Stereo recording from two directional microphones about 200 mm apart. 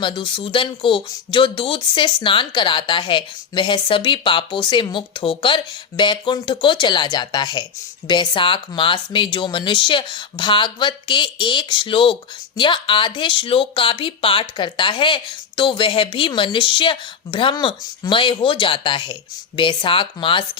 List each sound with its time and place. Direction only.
0.0 s speech: 25° left (ahead or behind)